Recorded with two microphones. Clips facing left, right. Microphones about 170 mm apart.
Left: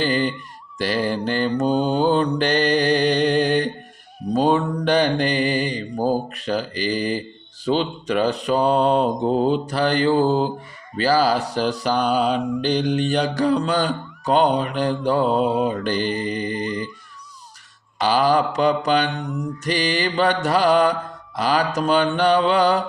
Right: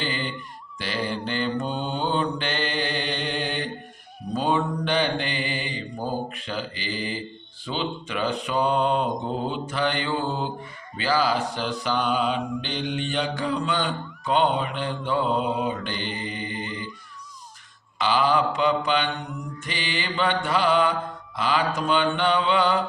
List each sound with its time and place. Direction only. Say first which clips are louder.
0.0 s a sound: left 9 dB; 40° left (ahead or behind)
0.8 s mantra: left 7 dB; 45° left (ahead or behind)
17.9 s mantra: left 4 dB; 40° left (ahead or behind)